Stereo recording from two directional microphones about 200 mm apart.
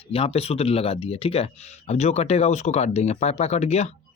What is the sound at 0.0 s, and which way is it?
Speech, 30° left (ahead or behind).